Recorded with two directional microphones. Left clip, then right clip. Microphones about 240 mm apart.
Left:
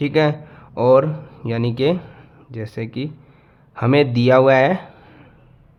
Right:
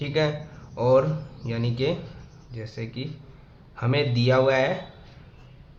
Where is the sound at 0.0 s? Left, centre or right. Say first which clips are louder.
Left 8 dB; left.